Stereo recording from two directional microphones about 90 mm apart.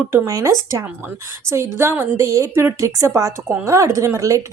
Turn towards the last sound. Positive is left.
turn(degrees=-40)  # may be behind; listen again after turning